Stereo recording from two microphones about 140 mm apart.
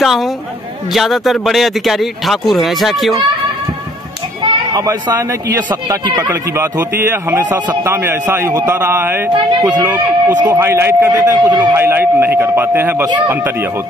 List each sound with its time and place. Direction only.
0.0 s speech: centre (ahead or behind)
4.4 s a sound: 30° right (ahead or behind)
5.7 s speech: 30° right (ahead or behind)
6.1 s a man's voice: 20° right (ahead or behind)
11.7 s a man's voice: 15° right (ahead or behind)